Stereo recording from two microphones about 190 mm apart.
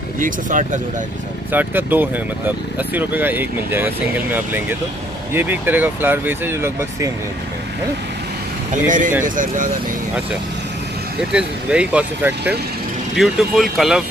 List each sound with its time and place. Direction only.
0.2 s speech: 45° right (ahead or behind)
1.5 s speech: 10° right (ahead or behind)
8.8 s speech: 45° right (ahead or behind)
11.3 s speech: 5° right (ahead or behind)